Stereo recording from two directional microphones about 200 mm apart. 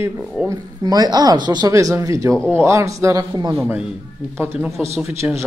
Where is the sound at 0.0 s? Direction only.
10° right (ahead or behind).